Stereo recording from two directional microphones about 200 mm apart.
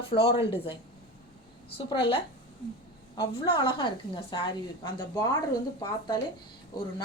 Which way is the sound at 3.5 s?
25° left (ahead or behind).